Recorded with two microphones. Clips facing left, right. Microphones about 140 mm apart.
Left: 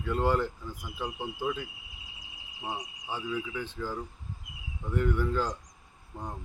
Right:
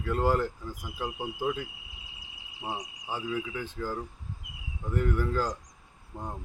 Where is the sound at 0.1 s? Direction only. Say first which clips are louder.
Right 1 dB; 5° right (ahead or behind).